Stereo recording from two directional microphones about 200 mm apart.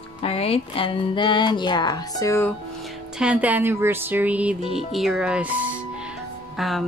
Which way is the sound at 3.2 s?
5° right (ahead or behind).